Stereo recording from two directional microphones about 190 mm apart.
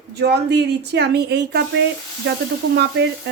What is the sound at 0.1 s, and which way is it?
Speech, 60° right (ahead or behind).